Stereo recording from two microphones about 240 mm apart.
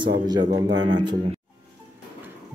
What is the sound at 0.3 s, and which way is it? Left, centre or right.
A man's voice, centre.